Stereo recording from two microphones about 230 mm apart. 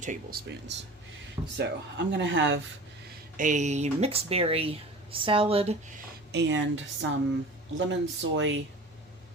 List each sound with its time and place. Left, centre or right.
0.0 s speech: right
1.5 s speech: right
3.3 s speech: right
6.3 s speech: right